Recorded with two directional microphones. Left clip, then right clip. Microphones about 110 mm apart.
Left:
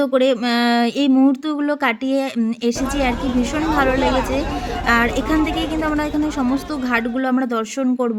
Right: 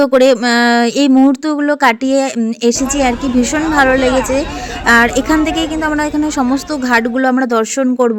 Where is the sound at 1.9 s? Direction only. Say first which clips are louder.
Right 7 dB; 60° right (ahead or behind).